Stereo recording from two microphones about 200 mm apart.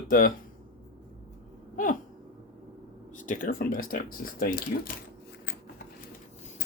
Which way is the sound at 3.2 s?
40° left (ahead or behind).